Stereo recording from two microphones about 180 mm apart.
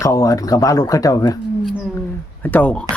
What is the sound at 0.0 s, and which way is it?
Speech, 20° left (ahead or behind).